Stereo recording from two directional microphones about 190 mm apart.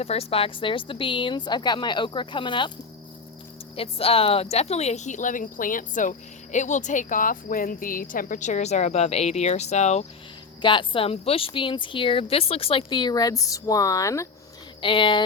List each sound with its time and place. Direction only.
0.0 s speech: 30° left (ahead or behind)
3.8 s speech: 30° left (ahead or behind)
10.6 s speech: 25° left (ahead or behind)